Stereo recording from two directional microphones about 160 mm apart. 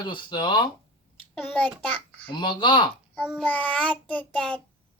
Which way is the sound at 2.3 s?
30° left (ahead or behind).